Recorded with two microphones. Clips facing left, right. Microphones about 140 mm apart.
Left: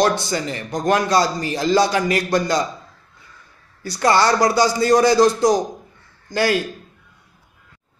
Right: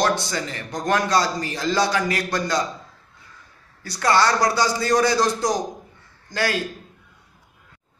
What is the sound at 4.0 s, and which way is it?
Speech, 20° left (ahead or behind).